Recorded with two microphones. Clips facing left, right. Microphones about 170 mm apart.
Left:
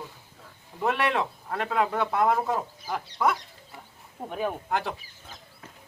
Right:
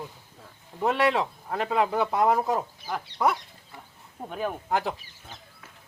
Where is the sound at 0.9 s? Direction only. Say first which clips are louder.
Right 2 dB; 5° right (ahead or behind).